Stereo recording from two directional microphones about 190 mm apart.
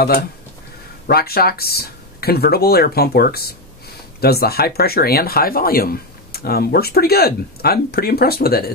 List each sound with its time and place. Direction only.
1.0 s speech: 55° left (ahead or behind)